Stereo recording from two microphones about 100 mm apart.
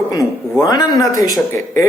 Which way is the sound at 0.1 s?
40° left (ahead or behind).